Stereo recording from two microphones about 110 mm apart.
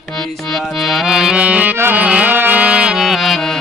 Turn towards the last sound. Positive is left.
turn(degrees=0)  # may be behind; listen again after turning